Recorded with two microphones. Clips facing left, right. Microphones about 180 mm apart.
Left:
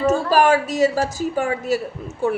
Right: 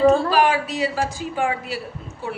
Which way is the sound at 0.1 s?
45° left (ahead or behind).